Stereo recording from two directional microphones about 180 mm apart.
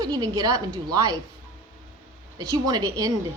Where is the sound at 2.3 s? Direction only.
20° right (ahead or behind).